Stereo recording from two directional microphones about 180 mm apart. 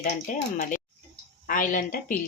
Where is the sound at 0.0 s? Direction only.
45° left (ahead or behind).